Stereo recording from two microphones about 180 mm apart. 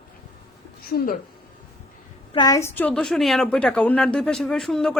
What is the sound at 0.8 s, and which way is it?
Speech, 55° left (ahead or behind).